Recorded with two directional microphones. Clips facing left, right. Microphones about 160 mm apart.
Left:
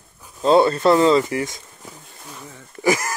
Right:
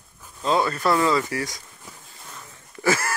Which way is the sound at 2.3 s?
15° left (ahead or behind).